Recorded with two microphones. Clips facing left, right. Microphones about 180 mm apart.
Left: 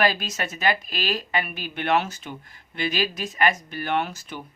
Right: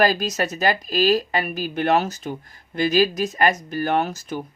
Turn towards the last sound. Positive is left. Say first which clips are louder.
# right 4 dB
turn(degrees=-40)  # may be behind; listen again after turning